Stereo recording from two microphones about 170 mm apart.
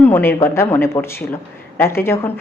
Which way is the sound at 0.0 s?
10° left (ahead or behind).